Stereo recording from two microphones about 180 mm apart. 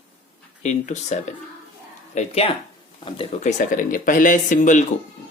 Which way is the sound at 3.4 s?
45° left (ahead or behind).